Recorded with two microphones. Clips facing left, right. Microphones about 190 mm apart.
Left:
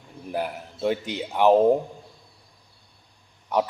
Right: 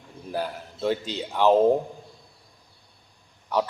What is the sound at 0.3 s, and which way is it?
A man's voice, 15° left (ahead or behind).